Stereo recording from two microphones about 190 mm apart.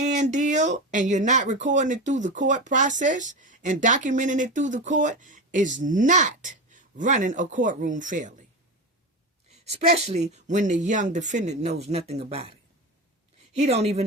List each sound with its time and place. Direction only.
0.0 s speech: 40° right (ahead or behind)
9.6 s speech: 35° right (ahead or behind)
13.5 s speech: 35° right (ahead or behind)